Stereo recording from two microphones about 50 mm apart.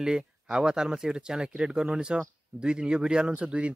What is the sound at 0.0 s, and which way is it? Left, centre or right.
Speech, centre.